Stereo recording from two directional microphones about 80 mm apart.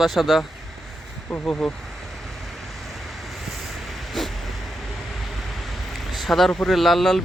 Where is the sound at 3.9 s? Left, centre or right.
Centre.